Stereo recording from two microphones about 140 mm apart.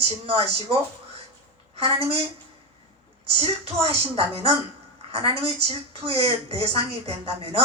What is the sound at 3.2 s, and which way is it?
A woman's voice, 45° right (ahead or behind).